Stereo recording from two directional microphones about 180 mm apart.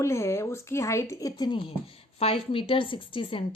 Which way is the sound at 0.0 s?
15° left (ahead or behind).